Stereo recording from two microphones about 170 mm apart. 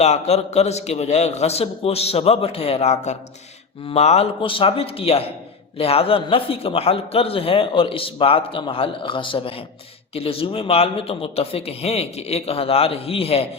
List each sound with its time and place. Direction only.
0.0 s a man's voice: 40° left (ahead or behind)